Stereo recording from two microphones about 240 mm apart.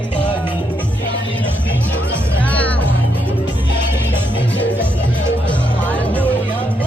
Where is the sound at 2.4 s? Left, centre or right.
Centre.